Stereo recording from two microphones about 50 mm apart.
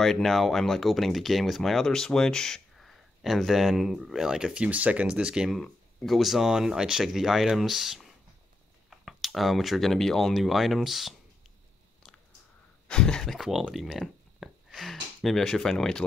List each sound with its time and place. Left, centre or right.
0.0 s speech: centre
4.6 s speech: right
5.1 s speech: centre
6.0 s speech: centre
12.8 s a sound: centre
13.4 s speech: centre
13.7 s a sound: centre